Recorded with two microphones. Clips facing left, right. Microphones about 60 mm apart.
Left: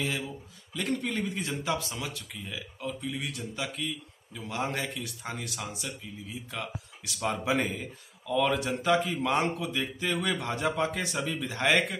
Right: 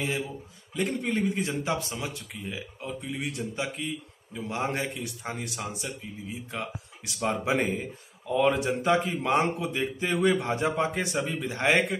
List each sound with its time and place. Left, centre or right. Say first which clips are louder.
0.7 s speech: right 3 dB; right
11.6 s speech: right 2 dB; centre